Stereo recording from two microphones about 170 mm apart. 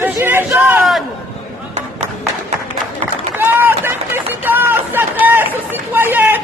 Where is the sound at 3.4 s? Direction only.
10° right (ahead or behind).